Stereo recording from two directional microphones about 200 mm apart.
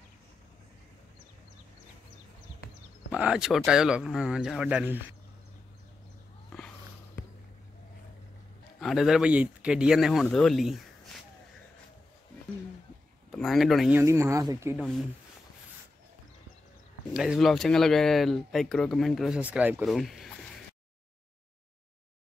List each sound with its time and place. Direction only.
3.1 s speech: 5° right (ahead or behind)
8.7 s speech: centre (ahead or behind)
13.3 s speech: centre (ahead or behind)
13.9 s speech: 15° right (ahead or behind)
17.1 s speech: 5° right (ahead or behind)